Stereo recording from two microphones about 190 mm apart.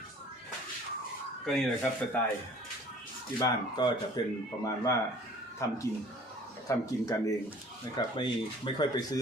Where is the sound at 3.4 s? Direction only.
20° left (ahead or behind).